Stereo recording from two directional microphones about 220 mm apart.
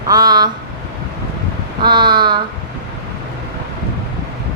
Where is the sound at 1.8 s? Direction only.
20° right (ahead or behind).